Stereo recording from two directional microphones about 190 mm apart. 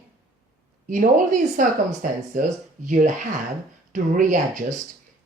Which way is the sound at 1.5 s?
45° right (ahead or behind).